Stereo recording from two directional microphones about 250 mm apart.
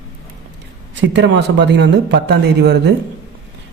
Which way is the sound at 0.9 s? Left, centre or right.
Right.